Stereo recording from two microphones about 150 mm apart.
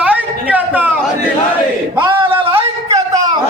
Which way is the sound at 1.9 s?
35° right (ahead or behind).